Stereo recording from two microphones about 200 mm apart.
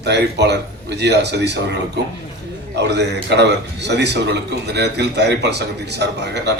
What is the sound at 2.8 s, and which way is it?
A man's voice, 60° right (ahead or behind).